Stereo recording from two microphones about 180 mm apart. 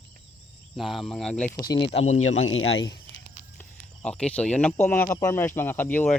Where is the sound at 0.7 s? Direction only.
Centre (ahead or behind).